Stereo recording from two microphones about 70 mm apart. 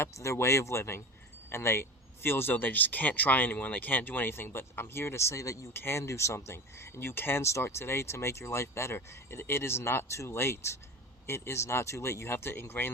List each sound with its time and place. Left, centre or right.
0.0 s speech: left
5.7 s speech: left